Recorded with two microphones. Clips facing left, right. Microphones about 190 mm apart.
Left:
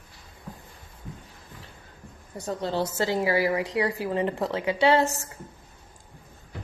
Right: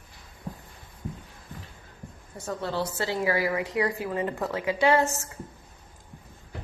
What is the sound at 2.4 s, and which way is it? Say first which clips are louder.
A woman's voice: left 2 dB; 20° left (ahead or behind).